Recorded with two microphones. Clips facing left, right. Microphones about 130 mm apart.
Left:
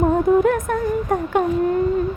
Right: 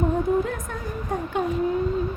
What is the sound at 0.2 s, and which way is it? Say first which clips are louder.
Music: left 7 dB; 80° left.